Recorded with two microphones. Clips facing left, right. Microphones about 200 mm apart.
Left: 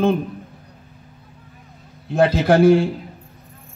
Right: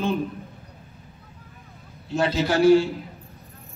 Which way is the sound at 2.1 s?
55° left (ahead or behind).